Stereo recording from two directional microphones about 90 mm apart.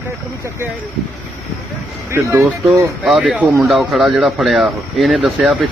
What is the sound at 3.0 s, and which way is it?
Speech, centre (ahead or behind).